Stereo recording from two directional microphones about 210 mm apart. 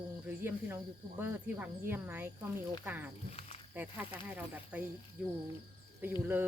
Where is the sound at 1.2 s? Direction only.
10° right (ahead or behind).